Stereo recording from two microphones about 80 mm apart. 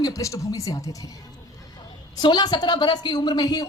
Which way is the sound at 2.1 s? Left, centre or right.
Left.